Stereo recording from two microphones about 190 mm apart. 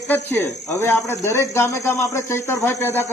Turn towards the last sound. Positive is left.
turn(degrees=10)  # may be behind; listen again after turning